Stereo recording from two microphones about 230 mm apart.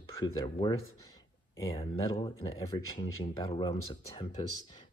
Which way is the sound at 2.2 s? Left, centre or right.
Centre.